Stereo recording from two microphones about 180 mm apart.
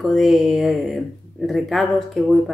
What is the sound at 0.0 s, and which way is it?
Speech, centre (ahead or behind).